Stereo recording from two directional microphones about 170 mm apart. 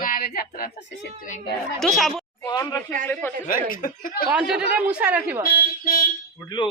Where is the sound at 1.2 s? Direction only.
45° left (ahead or behind).